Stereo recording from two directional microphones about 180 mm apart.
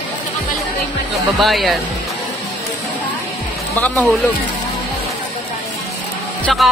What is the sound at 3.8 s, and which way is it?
Speech, 5° left (ahead or behind).